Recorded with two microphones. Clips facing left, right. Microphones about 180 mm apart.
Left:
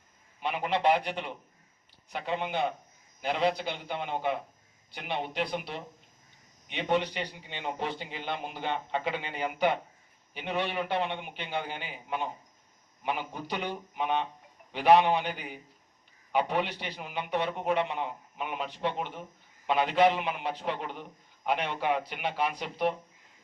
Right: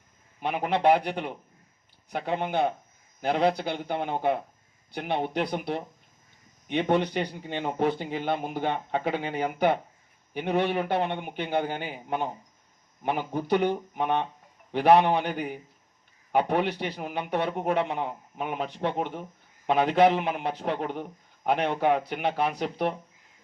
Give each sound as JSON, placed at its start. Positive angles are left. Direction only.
{"t": 0.4, "sound": "a man's voice", "side_deg": -50}